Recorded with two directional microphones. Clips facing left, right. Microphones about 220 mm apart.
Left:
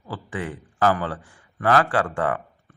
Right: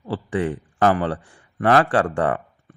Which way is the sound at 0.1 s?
35° right (ahead or behind).